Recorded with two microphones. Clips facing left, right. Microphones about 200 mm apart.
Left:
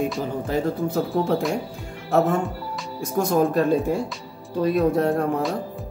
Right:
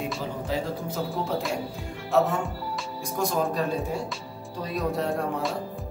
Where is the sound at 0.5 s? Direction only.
55° left (ahead or behind).